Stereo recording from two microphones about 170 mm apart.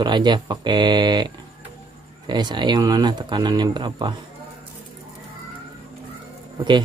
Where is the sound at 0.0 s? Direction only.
25° right (ahead or behind).